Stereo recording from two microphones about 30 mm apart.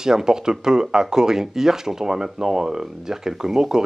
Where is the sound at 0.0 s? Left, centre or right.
Centre.